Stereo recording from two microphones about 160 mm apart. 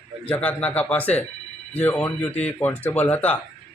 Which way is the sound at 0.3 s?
10° left (ahead or behind).